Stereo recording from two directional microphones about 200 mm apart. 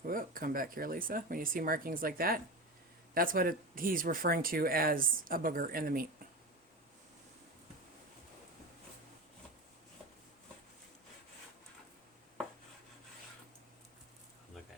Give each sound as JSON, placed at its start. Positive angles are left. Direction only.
{"t": 0.1, "sound": "speech", "side_deg": -45}